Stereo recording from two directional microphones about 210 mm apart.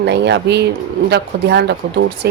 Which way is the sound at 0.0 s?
55° right (ahead or behind).